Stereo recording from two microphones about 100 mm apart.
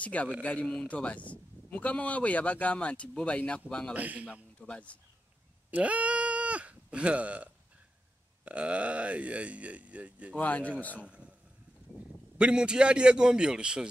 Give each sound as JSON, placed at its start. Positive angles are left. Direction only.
{"t": 0.0, "sound": "a man's voice", "side_deg": 15}
{"t": 3.9, "sound": "speech", "side_deg": -15}
{"t": 4.3, "sound": "a man's voice", "side_deg": 10}
{"t": 5.7, "sound": "bleat", "side_deg": -15}
{"t": 8.5, "sound": "speech", "side_deg": -15}
{"t": 10.3, "sound": "a man's voice", "side_deg": 15}
{"t": 11.1, "sound": "a sound", "side_deg": -10}
{"t": 12.4, "sound": "speech", "side_deg": -10}